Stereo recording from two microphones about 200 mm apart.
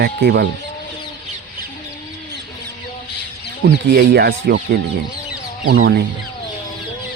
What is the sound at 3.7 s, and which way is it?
Speech, 55° right (ahead or behind).